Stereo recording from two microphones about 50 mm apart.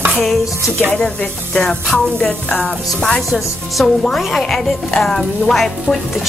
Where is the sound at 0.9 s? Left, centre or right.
Centre.